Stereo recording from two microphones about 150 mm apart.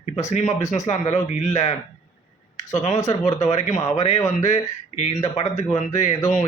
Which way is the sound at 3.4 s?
50° left (ahead or behind).